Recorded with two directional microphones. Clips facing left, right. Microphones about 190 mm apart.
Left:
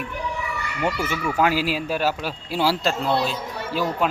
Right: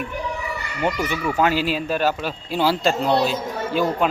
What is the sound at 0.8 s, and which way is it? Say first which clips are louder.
Speech: right 2 dB; 15° right (ahead or behind).